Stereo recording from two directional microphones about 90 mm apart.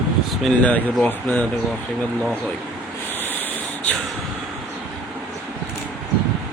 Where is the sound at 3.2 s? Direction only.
20° left (ahead or behind).